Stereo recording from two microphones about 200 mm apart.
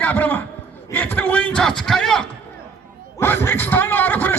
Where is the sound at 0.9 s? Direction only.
10° left (ahead or behind).